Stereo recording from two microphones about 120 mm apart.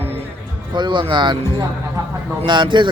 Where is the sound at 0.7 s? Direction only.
40° right (ahead or behind).